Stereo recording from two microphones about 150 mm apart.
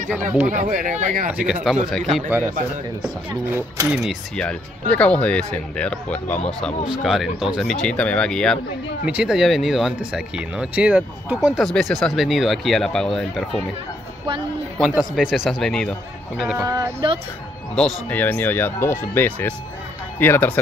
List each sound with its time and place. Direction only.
0.5 s speech: 60° right (ahead or behind)
1.3 s speech: 10° right (ahead or behind)
2.2 s speech: 10° right (ahead or behind)
3.9 s speech: 5° right (ahead or behind)
9.0 s speech: 5° right (ahead or behind)
15.0 s speech: 5° right (ahead or behind)
16.5 s speech: 20° right (ahead or behind)
17.7 s speech: 5° left (ahead or behind)